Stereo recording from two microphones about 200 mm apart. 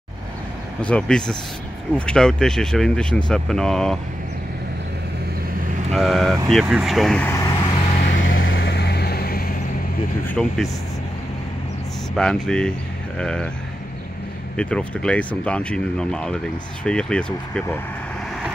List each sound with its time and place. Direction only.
0.8 s speech: 5° left (ahead or behind)
5.9 s speech: centre (ahead or behind); by 7.6 s 15° left (ahead or behind)
8.0 s vehicle: 50° left (ahead or behind)
10.2 s speech: 5° left (ahead or behind)
12.2 s speech: 5° left (ahead or behind)
14.6 s speech: 5° left (ahead or behind)